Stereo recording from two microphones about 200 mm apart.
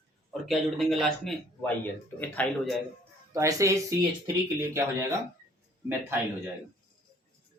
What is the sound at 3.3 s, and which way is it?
Speech, 15° right (ahead or behind).